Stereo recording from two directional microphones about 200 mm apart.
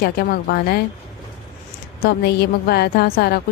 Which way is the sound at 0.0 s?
50° left (ahead or behind).